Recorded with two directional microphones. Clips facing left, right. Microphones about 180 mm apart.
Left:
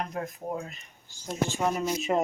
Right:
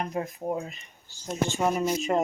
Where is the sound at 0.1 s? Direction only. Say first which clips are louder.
Right 3 dB; 5° right (ahead or behind).